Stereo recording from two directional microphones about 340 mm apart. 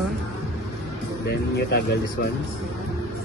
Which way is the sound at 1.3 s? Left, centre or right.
Left.